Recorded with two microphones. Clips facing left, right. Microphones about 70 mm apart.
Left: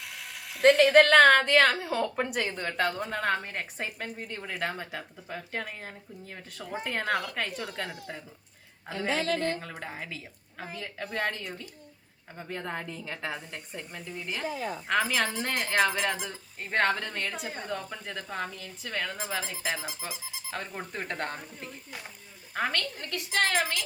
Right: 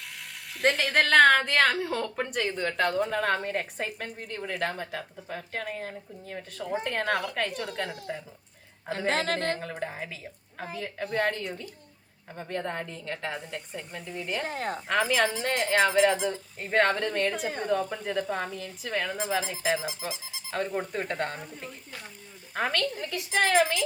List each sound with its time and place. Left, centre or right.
0.0 s speech: centre
9.0 s a woman's voice: right
9.6 s speech: centre
14.4 s a woman's voice: right
14.8 s speech: centre